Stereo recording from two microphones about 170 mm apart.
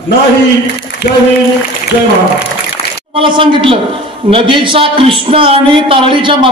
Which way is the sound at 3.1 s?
30° right (ahead or behind).